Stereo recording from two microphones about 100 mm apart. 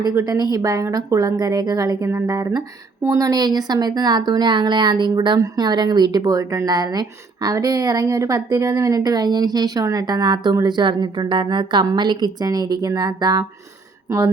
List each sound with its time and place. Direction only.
0.2 s speech: 35° right (ahead or behind)